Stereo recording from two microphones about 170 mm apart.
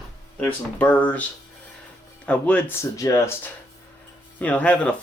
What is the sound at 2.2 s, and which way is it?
Speech, 10° left (ahead or behind).